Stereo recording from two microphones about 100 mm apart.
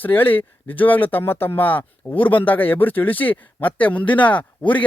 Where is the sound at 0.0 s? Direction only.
20° left (ahead or behind).